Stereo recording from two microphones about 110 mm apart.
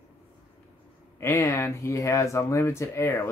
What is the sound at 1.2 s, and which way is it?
Speech, 25° left (ahead or behind).